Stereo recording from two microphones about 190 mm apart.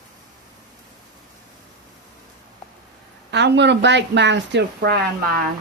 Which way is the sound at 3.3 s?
65° right (ahead or behind).